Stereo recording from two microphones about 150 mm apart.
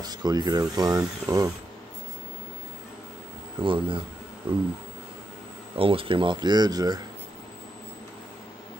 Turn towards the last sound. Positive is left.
turn(degrees=-25)  # may be behind; listen again after turning